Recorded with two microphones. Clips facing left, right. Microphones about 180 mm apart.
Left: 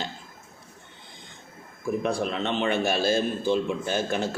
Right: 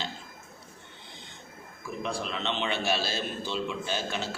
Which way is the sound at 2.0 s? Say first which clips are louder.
Left 5 dB; 50° left (ahead or behind).